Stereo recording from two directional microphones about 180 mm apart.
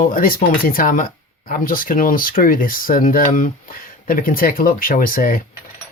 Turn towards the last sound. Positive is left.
turn(degrees=50)  # may be behind; listen again after turning